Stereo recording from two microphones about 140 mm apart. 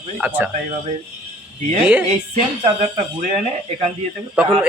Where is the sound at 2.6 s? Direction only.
55° right (ahead or behind).